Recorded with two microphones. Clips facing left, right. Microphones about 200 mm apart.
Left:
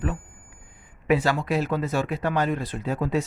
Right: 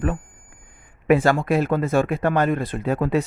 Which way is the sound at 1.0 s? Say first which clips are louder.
Right 5 dB; 50° right (ahead or behind).